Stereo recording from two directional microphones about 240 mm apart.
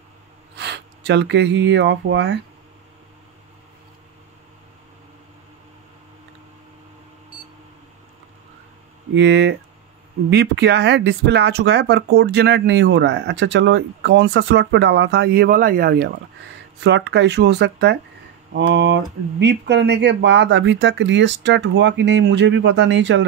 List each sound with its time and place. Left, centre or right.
0.6 s speech: right
9.1 s speech: right